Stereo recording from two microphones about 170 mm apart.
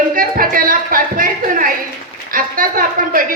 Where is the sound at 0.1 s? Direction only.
55° right (ahead or behind).